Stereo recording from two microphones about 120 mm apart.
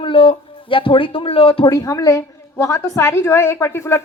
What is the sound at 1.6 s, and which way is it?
A woman's voice, 30° left (ahead or behind).